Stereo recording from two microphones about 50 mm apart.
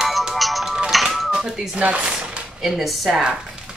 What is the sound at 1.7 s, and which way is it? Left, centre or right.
Speech, right.